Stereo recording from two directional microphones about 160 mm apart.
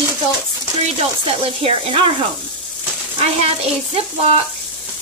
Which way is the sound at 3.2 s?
40° right (ahead or behind).